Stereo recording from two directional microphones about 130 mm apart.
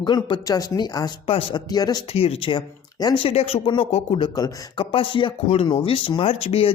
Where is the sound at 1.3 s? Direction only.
45° left (ahead or behind).